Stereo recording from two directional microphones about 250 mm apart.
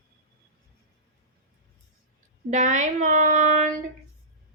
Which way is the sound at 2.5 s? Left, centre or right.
Right.